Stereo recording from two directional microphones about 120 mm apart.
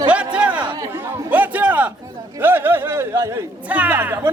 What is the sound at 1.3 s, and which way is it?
Music, 15° right (ahead or behind).